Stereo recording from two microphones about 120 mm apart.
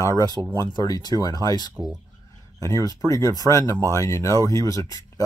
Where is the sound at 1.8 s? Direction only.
35° right (ahead or behind).